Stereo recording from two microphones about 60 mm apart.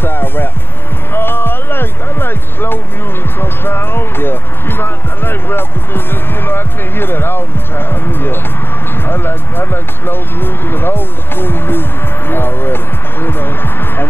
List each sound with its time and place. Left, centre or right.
0.0 s music: left
1.1 s a sound: left
3.3 s speech: left
12.3 s music: left